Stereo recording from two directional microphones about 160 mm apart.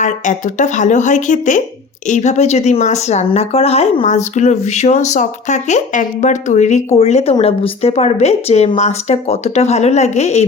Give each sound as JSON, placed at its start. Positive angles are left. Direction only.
{"t": 0.0, "sound": "a woman's voice", "side_deg": 50}